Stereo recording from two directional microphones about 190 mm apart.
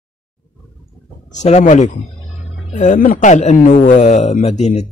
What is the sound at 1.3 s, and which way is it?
Speech, 35° left (ahead or behind).